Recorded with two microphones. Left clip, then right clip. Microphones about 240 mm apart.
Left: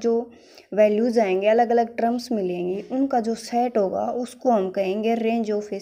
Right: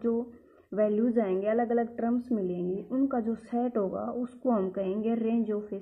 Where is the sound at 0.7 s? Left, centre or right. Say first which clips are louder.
Left 9 dB; left.